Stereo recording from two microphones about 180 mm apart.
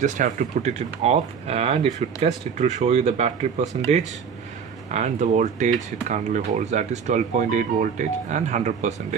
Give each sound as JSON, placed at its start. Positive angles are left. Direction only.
{"t": 0.0, "sound": "speech", "side_deg": -45}
{"t": 4.9, "sound": "speech", "side_deg": -40}